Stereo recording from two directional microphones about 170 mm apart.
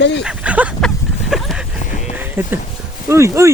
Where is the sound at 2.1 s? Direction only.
10° right (ahead or behind).